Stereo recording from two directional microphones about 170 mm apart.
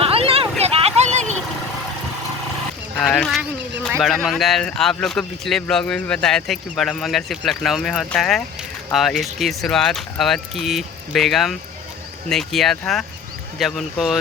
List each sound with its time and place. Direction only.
0.0 s vehicle: 35° right (ahead or behind)
3.0 s speech: 5° left (ahead or behind)